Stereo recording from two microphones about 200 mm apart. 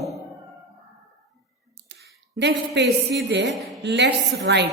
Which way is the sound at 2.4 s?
60° right (ahead or behind).